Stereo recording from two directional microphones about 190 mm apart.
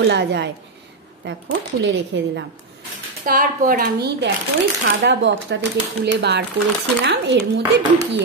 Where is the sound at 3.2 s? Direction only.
45° right (ahead or behind).